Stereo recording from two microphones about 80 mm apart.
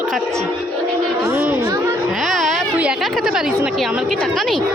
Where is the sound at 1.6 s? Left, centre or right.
Right.